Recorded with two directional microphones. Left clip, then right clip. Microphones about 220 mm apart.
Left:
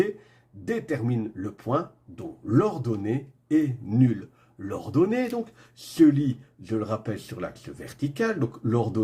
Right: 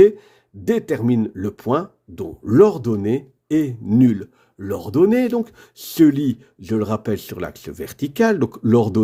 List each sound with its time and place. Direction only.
0.0 s speech: 50° right (ahead or behind)